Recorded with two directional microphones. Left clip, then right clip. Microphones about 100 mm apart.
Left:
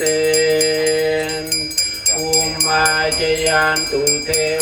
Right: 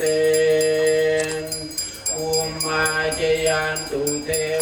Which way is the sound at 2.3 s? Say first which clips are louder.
Left 5 dB; 10° left (ahead or behind).